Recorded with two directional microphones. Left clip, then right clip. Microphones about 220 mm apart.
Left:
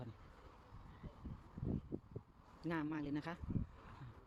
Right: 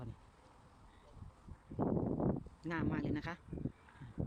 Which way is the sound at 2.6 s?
Centre (ahead or behind).